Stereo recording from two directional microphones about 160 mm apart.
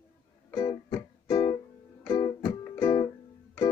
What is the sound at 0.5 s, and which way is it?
Music, 25° left (ahead or behind).